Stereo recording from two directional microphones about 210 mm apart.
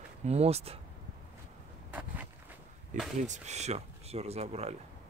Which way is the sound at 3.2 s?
35° right (ahead or behind).